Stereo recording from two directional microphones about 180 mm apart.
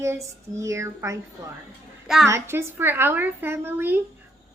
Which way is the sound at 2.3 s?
15° right (ahead or behind).